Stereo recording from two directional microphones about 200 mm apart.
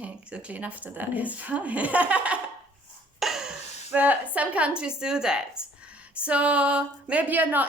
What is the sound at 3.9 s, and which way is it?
Speech, 10° right (ahead or behind).